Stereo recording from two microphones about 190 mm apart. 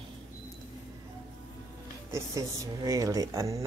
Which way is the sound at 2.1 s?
15° right (ahead or behind).